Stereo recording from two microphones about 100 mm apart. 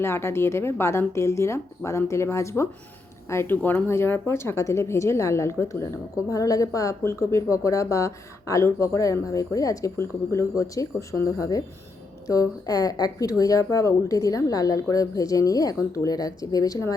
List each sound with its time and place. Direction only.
0.0 s a woman's voice: 25° left (ahead or behind)